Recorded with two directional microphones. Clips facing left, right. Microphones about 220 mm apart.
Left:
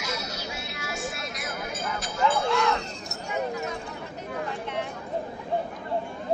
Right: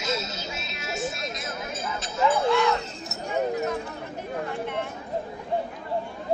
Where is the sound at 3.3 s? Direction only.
55° right (ahead or behind).